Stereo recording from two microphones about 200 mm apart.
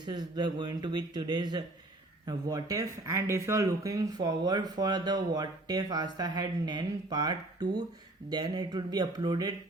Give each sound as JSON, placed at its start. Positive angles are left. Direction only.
{"t": 0.0, "sound": "speech", "side_deg": -20}